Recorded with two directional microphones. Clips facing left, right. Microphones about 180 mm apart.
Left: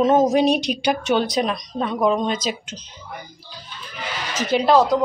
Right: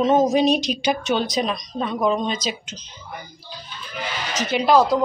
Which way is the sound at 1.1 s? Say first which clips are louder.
Left 2 dB; 60° left (ahead or behind).